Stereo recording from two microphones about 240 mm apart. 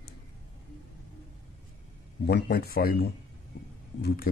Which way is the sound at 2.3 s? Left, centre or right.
Left.